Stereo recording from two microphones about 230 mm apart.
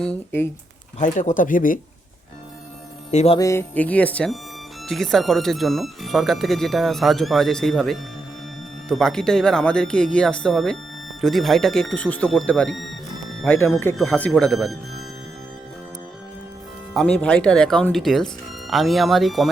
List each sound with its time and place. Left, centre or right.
0.0 s music: centre
0.9 s speech: left
3.1 s music: left
3.3 s music: centre
4.9 s speech: centre
16.9 s speech: centre